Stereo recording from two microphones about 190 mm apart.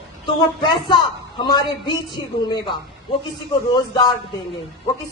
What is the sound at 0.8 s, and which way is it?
Speech, 25° left (ahead or behind).